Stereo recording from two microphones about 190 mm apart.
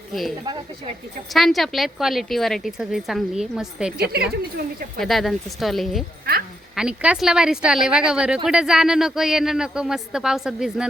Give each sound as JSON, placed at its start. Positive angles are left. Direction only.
{"t": 0.1, "sound": "speech", "side_deg": 0}
{"t": 0.4, "sound": "speech", "side_deg": -25}
{"t": 1.3, "sound": "a woman's voice", "side_deg": 0}
{"t": 3.9, "sound": "a woman's voice", "side_deg": -55}
{"t": 4.9, "sound": "a woman's voice", "side_deg": 0}